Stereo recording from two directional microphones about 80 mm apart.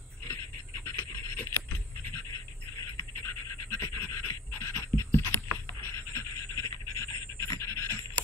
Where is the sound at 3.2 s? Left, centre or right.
Left.